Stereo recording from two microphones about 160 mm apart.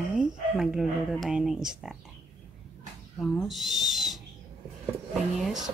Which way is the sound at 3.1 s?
Centre (ahead or behind).